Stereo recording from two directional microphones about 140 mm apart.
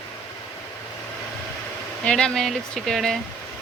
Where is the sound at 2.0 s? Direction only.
5° left (ahead or behind).